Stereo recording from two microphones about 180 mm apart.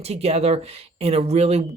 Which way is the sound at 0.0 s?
35° right (ahead or behind).